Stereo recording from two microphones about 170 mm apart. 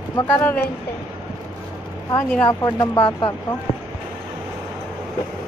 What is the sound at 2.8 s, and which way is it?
Speech, 30° left (ahead or behind).